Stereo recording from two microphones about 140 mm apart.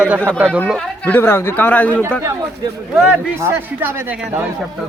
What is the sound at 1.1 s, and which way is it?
Speech, 15° left (ahead or behind).